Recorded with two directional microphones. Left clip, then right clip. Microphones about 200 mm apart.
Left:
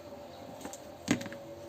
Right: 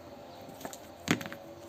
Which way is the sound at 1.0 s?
25° right (ahead or behind).